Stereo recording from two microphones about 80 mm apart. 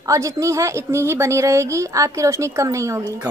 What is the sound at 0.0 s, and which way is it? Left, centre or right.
A woman's voice, right.